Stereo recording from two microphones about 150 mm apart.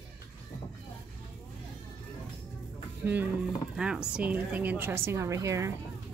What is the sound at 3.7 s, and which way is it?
A woman's voice, 5° right (ahead or behind).